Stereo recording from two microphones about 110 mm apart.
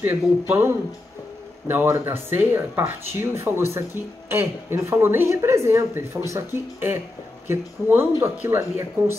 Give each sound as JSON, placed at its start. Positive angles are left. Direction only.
{"t": 0.0, "sound": "speech", "side_deg": -20}